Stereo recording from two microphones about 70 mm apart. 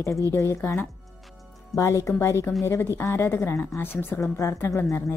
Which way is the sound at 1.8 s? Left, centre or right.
Left.